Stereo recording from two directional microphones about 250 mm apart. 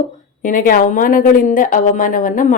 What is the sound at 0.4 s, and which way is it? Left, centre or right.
Speech, left.